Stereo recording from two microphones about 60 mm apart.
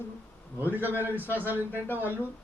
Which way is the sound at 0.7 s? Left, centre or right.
Right.